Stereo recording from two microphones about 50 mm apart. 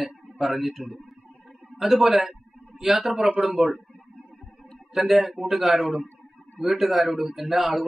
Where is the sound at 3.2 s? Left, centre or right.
Right.